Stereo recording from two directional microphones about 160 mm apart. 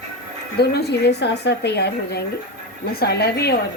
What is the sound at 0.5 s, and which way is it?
A woman's voice, 90° left.